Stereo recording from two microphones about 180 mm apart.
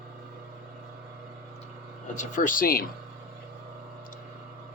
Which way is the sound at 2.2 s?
45° left (ahead or behind).